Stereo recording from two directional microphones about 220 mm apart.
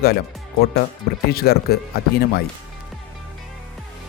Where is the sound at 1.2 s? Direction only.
45° left (ahead or behind).